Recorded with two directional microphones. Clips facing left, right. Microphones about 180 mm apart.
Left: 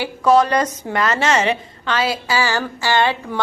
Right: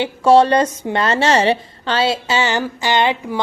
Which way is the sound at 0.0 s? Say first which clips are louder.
Right 3 dB; 30° right (ahead or behind).